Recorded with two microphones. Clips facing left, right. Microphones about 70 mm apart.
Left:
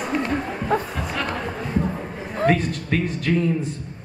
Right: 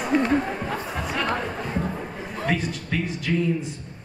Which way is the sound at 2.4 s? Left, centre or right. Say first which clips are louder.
Left 6 dB; left.